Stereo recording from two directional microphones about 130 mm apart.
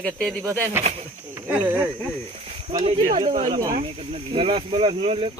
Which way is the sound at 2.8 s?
50° right (ahead or behind).